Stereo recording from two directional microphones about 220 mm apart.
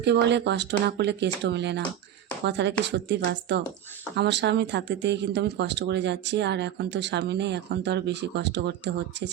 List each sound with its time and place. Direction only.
0.0 s speech: 50° right (ahead or behind)